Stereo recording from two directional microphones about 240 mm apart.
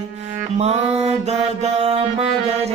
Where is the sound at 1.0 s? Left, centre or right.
Right.